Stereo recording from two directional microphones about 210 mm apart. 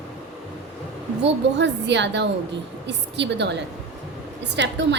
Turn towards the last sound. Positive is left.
turn(degrees=-55)  # may be behind; listen again after turning